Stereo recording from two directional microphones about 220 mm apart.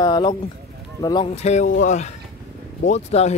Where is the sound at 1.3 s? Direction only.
30° left (ahead or behind).